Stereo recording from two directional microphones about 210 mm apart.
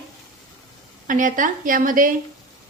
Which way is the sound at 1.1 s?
40° right (ahead or behind).